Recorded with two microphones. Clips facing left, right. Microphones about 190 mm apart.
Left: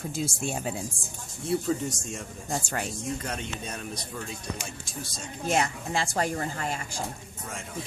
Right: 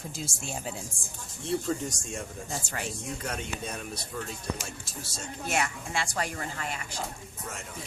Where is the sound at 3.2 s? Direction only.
5° right (ahead or behind).